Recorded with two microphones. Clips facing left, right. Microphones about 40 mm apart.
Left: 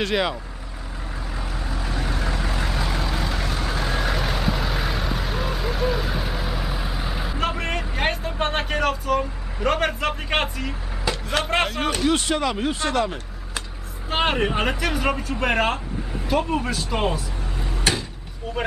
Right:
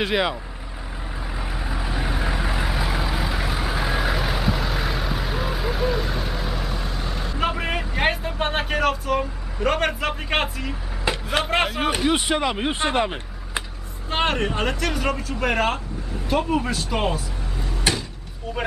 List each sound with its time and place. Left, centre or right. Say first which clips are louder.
0.0 s speech: right 1 dB; centre
1.4 s vehicle: right 2 dB; centre
7.3 s speech: right 2 dB; centre; by 13.7 s right
14.1 s speech: left 1 dB; centre